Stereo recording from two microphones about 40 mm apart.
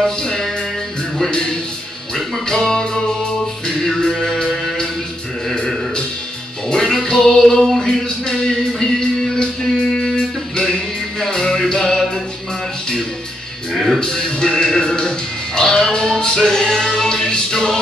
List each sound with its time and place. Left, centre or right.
0.0 s music: centre
1.3 s a sound: centre
2.4 s music: centre
6.7 s music: centre
13.9 s music: centre